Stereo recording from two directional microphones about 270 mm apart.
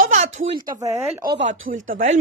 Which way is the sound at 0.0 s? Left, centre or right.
Right.